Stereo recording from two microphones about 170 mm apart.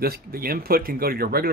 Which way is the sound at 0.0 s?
65° right (ahead or behind).